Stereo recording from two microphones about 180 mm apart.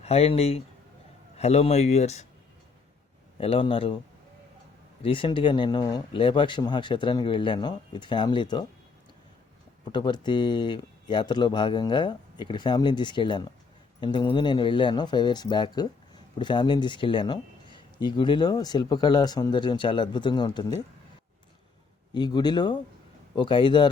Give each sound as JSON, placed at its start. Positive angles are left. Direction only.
{"t": 0.0, "sound": "speech", "side_deg": 35}
{"t": 3.3, "sound": "speech", "side_deg": 30}
{"t": 5.0, "sound": "speech", "side_deg": 30}
{"t": 9.9, "sound": "speech", "side_deg": 25}
{"t": 22.1, "sound": "speech", "side_deg": 25}